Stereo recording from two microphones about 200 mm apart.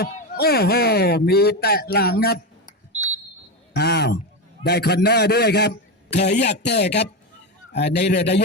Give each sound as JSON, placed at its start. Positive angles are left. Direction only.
{"t": 0.0, "sound": "speech", "side_deg": 50}
{"t": 3.8, "sound": "a sound", "side_deg": 55}
{"t": 4.6, "sound": "a man's voice", "side_deg": 55}